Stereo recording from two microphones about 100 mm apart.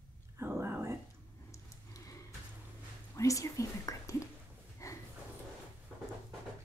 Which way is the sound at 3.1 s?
35° left (ahead or behind).